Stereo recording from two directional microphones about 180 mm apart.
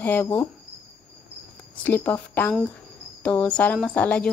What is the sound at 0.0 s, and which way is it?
Speech, 10° left (ahead or behind).